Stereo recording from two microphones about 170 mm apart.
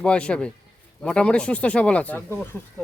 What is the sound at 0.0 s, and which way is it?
Speech, 5° left (ahead or behind).